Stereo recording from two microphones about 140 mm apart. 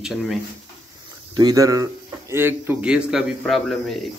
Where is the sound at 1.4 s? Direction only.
25° right (ahead or behind); by 4.0 s centre (ahead or behind).